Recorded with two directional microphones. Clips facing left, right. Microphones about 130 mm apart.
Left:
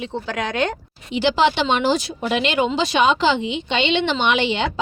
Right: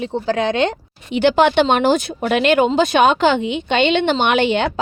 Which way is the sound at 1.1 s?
55° right (ahead or behind).